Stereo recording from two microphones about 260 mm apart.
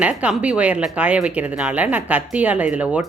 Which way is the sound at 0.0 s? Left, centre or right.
Centre.